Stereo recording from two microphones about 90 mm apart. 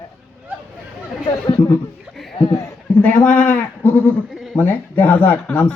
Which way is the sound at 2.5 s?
35° left (ahead or behind).